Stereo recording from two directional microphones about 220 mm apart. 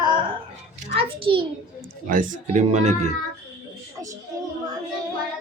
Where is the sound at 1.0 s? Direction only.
25° right (ahead or behind).